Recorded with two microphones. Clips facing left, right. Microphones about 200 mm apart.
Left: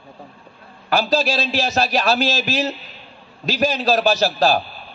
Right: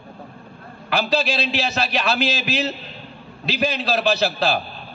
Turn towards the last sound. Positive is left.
turn(degrees=45)  # may be behind; listen again after turning